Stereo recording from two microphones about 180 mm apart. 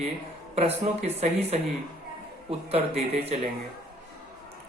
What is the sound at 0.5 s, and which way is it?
Speech, 35° right (ahead or behind).